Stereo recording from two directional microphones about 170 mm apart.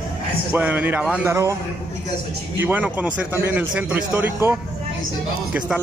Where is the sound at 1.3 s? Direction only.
20° right (ahead or behind).